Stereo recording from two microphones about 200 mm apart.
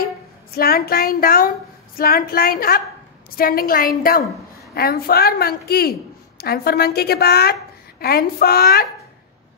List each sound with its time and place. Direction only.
0.6 s a woman's voice: 50° left (ahead or behind)